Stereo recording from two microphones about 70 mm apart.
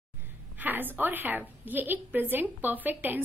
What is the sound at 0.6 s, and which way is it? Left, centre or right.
A woman's voice, right.